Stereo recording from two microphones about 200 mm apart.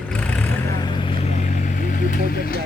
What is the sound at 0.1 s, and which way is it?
Vehicle, 5° left (ahead or behind).